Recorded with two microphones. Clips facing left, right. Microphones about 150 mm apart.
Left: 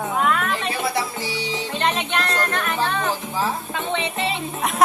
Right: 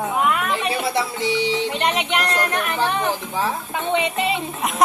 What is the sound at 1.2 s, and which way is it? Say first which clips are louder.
Speech: right 6 dB; 25° right (ahead or behind).